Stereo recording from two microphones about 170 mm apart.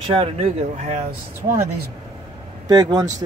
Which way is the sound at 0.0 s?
35° right (ahead or behind).